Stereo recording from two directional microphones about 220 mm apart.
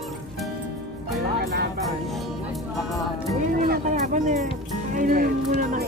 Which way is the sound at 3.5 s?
40° right (ahead or behind).